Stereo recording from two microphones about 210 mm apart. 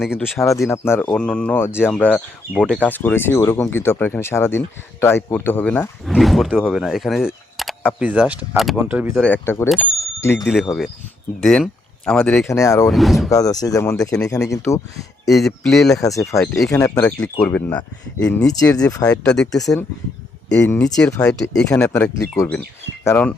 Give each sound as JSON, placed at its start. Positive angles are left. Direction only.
{"t": 0.2, "sound": "speech", "side_deg": 15}
{"t": 9.2, "sound": "speech", "side_deg": 10}
{"t": 10.4, "sound": "speech", "side_deg": 0}
{"t": 12.9, "sound": "speech", "side_deg": 0}
{"t": 13.3, "sound": "speech", "side_deg": 15}
{"t": 15.3, "sound": "speech", "side_deg": 0}
{"t": 16.0, "sound": "speech", "side_deg": 15}
{"t": 16.4, "sound": "speech", "side_deg": 5}
{"t": 18.4, "sound": "speech", "side_deg": 15}
{"t": 19.1, "sound": "speech", "side_deg": 5}
{"t": 19.5, "sound": "speech", "side_deg": 15}